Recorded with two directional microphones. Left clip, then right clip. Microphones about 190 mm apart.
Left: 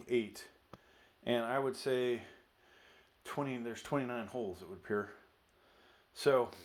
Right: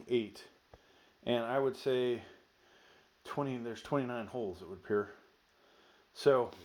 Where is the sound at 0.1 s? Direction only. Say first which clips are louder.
Right 1 dB; 45° right (ahead or behind).